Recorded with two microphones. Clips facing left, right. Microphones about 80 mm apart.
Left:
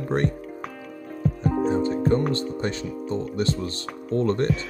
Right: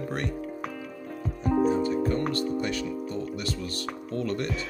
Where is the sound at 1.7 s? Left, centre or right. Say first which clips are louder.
Left 3 dB; left.